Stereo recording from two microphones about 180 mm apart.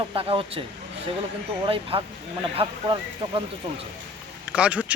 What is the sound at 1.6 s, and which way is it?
Speech, 30° right (ahead or behind).